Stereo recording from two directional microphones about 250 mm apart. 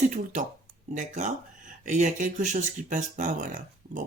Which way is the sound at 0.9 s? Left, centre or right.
Right.